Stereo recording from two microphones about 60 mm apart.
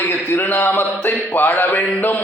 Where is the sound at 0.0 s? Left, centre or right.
Left.